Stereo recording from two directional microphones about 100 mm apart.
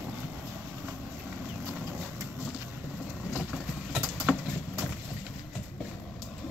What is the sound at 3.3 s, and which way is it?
Clip-clop, 15° right (ahead or behind).